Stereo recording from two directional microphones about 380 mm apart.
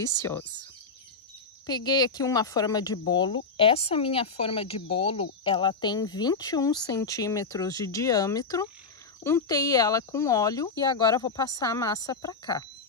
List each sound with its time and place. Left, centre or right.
0.2 s speech: centre
1.7 s speech: centre